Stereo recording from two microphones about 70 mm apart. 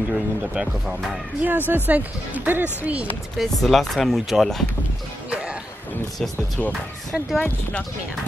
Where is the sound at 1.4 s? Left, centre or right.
Right.